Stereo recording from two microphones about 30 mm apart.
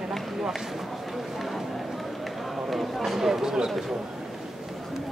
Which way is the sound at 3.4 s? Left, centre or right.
Right.